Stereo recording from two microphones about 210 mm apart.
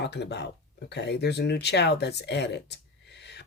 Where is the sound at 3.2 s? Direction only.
55° left (ahead or behind).